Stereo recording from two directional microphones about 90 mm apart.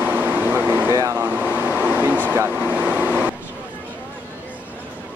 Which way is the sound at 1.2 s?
20° right (ahead or behind).